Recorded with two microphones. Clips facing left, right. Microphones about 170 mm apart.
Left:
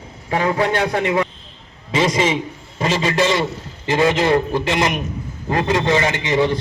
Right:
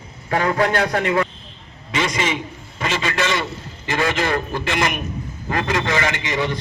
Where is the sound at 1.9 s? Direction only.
30° left (ahead or behind).